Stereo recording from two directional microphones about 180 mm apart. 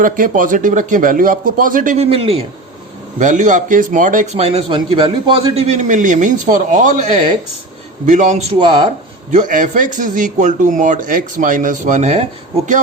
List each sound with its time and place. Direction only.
0.0 s speech: 50° right (ahead or behind)
2.0 s speech: 30° right (ahead or behind)
3.2 s speech: 40° right (ahead or behind); by 8.9 s 25° right (ahead or behind)
9.3 s speech: 45° right (ahead or behind)